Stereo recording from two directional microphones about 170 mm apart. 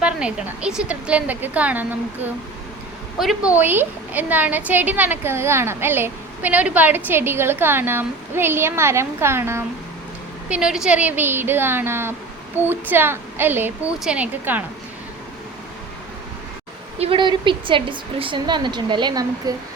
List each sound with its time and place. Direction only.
0.0 s a woman's voice: 5° right (ahead or behind)
17.0 s a woman's voice: 30° right (ahead or behind)